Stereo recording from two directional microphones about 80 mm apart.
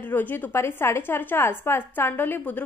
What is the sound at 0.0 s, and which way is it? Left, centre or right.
A woman's voice, left.